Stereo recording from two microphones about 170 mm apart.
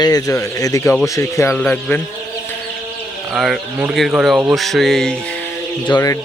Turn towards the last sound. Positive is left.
turn(degrees=20)  # may be behind; listen again after turning